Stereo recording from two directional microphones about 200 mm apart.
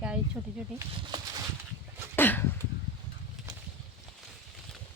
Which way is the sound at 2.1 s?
10° left (ahead or behind).